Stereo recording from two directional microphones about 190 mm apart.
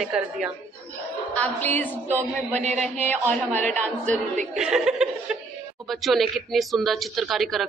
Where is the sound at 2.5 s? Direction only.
35° right (ahead or behind).